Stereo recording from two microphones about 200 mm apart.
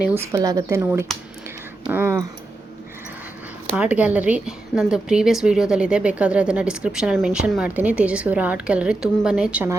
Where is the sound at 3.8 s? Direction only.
5° right (ahead or behind).